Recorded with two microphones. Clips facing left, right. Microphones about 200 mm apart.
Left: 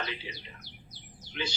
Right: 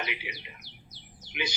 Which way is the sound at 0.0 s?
15° right (ahead or behind).